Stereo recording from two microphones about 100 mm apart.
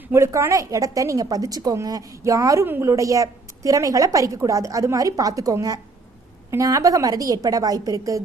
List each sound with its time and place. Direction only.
0.1 s a woman's voice: 30° right (ahead or behind)
2.6 s a woman's voice: 20° right (ahead or behind)
2.9 s a woman's voice: 35° right (ahead or behind)